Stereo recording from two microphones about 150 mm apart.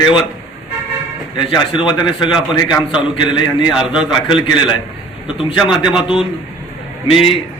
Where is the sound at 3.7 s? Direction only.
5° right (ahead or behind).